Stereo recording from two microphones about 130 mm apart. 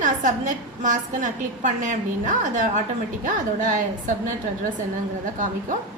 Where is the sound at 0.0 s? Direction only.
75° right (ahead or behind).